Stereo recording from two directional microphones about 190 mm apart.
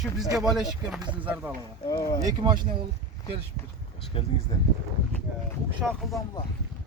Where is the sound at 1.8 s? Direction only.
20° left (ahead or behind).